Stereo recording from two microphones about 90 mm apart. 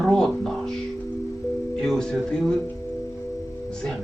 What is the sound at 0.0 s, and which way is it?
Speech, 5° left (ahead or behind).